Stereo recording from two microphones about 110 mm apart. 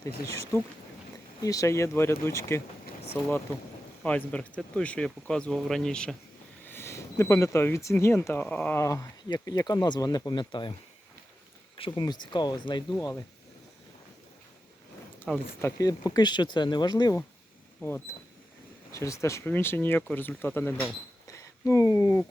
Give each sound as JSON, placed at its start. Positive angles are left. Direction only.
{"t": 0.0, "sound": "speech", "side_deg": 25}
{"t": 6.7, "sound": "speech", "side_deg": 25}
{"t": 8.8, "sound": "speech", "side_deg": 25}
{"t": 9.3, "sound": "speech", "side_deg": 40}
{"t": 11.8, "sound": "speech", "side_deg": 45}
{"t": 15.3, "sound": "speech", "side_deg": 5}
{"t": 15.6, "sound": "speech", "side_deg": 35}
{"t": 17.7, "sound": "speech", "side_deg": 20}
{"t": 21.2, "sound": "a sound", "side_deg": 30}